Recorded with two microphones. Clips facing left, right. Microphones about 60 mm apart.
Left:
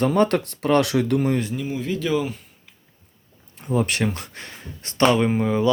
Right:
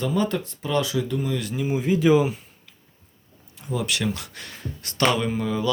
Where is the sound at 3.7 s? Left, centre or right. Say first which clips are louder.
Left 4 dB; left.